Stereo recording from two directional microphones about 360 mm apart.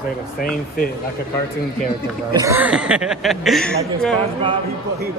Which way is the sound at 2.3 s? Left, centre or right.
Centre.